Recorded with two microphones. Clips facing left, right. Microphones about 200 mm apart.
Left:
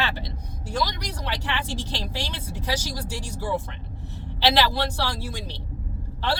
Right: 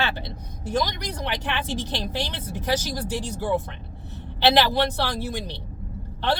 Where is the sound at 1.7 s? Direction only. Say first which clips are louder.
Right 3 dB; 20° right (ahead or behind).